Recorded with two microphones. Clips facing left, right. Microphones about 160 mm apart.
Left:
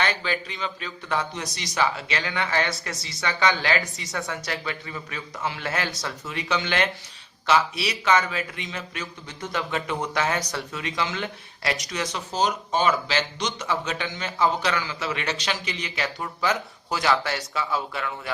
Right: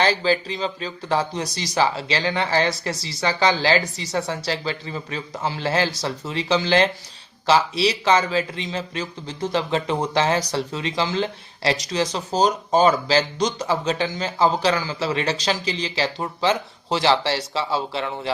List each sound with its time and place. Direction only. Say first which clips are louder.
0.0 s a man's voice: right 7 dB; 30° right (ahead or behind)